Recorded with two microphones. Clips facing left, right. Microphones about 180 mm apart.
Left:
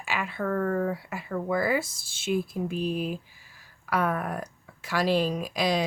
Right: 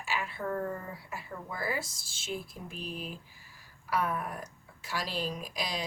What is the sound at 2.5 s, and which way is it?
Speech, 85° left.